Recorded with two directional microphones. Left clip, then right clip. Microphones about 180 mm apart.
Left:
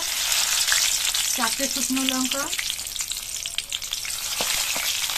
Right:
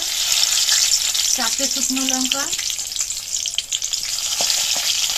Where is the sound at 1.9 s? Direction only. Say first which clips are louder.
Right 4 dB; centre (ahead or behind).